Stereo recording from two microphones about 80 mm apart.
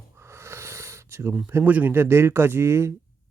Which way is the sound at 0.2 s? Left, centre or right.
Right.